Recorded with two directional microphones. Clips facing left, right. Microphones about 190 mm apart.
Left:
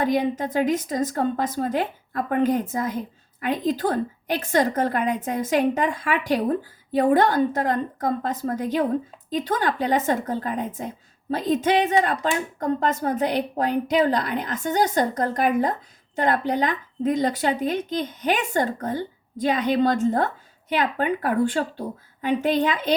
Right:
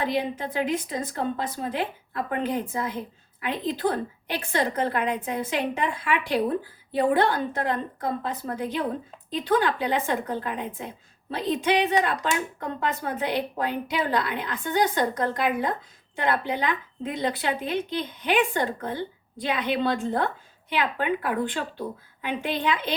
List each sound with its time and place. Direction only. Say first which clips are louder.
0.0 s a woman's voice: left 5 dB; 45° left (ahead or behind)